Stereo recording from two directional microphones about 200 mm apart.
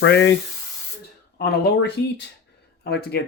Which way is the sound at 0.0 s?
60° left (ahead or behind).